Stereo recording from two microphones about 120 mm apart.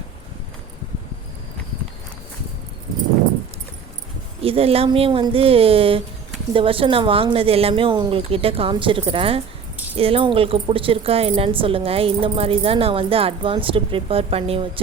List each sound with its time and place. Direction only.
4.4 s speech: 55° right (ahead or behind)